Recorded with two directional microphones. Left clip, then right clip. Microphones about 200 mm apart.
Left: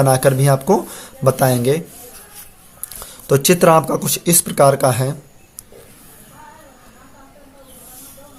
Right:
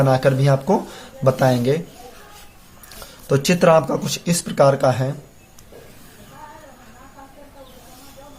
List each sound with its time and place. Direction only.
0.0 s speech: 30° left (ahead or behind)
3.2 s speech: 30° left (ahead or behind)